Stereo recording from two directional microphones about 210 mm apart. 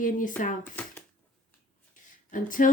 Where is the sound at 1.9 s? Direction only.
40° left (ahead or behind).